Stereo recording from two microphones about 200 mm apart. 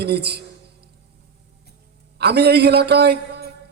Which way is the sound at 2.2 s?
55° right (ahead or behind).